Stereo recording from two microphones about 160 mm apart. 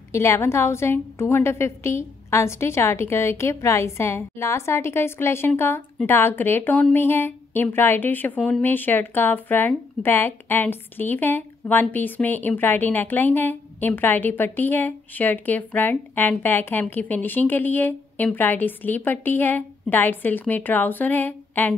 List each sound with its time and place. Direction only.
0.1 s speech: 15° left (ahead or behind)